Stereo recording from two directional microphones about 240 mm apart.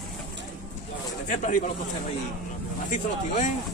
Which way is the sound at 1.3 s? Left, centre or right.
Left.